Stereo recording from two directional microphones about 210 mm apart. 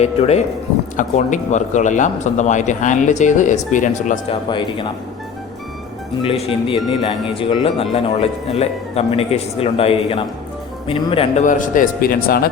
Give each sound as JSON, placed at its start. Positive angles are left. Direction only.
{"t": 0.0, "sound": "speech", "side_deg": 30}
{"t": 4.4, "sound": "speech", "side_deg": 20}
{"t": 6.7, "sound": "speech", "side_deg": 25}